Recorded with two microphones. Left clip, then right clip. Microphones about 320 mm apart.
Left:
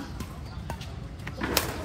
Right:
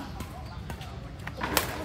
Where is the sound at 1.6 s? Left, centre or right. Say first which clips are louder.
Even; centre.